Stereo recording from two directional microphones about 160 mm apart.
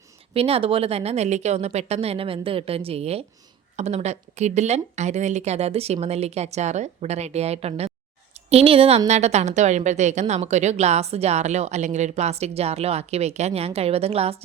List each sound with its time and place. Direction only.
0.3 s a woman's voice: 35° right (ahead or behind)